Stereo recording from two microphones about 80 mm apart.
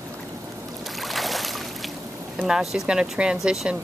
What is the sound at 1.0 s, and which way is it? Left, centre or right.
Boat, centre.